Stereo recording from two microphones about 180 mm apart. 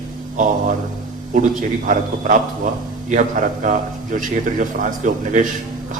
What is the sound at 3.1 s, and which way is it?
A man's voice, 45° right (ahead or behind).